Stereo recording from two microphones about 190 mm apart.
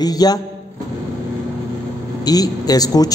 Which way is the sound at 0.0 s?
20° left (ahead or behind).